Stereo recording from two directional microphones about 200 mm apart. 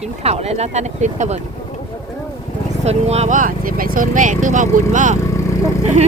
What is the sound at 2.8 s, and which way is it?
Speech, 30° right (ahead or behind).